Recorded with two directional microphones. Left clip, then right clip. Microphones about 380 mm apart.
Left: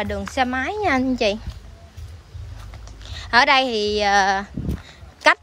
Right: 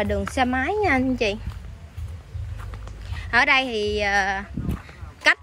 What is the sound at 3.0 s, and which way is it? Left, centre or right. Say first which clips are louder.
A woman's voice: left 3 dB; centre.